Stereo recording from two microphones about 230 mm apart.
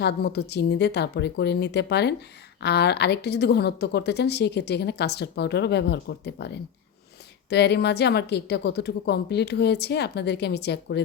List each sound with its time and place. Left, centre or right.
0.0 s a woman's voice: left